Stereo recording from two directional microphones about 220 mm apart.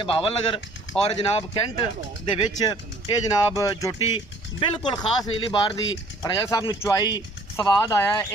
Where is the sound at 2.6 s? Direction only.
15° left (ahead or behind).